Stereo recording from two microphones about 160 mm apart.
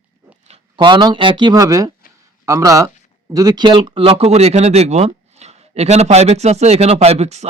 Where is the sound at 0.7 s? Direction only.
30° right (ahead or behind).